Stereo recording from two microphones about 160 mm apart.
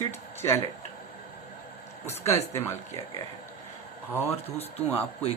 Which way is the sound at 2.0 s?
15° left (ahead or behind).